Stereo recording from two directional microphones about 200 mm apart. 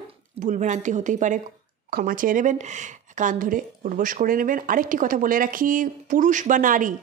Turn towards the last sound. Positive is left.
turn(degrees=-40)  # may be behind; listen again after turning